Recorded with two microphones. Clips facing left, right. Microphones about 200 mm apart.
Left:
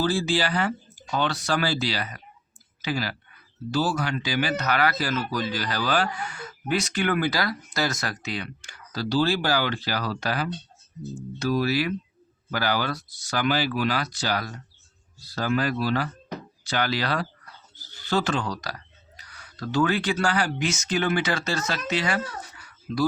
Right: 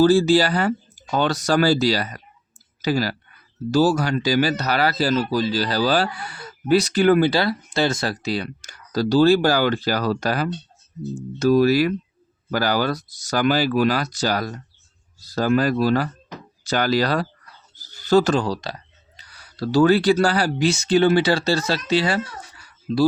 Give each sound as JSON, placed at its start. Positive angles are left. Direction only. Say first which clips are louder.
{"t": 0.0, "sound": "speech", "louder": "right 9 dB", "side_deg": -40}